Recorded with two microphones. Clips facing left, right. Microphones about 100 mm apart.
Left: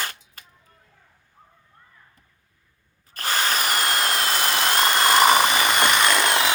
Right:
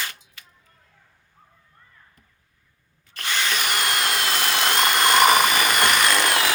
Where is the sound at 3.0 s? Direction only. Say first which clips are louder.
Left 2 dB; 40° left (ahead or behind).